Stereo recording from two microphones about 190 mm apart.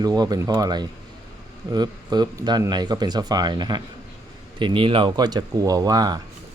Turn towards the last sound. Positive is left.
turn(degrees=-20)  # may be behind; listen again after turning